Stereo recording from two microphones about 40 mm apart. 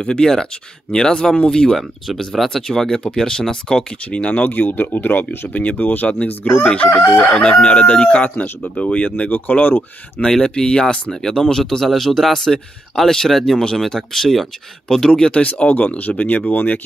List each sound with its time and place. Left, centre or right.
0.0 s speech: centre
1.8 s speech: centre
2.5 s speech: centre
4.1 s speech: left
4.5 s speech: left
6.6 s speech: left
10.4 s speech: centre
15.4 s speech: left